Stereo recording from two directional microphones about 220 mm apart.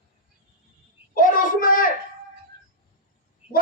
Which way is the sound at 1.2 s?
40° left (ahead or behind).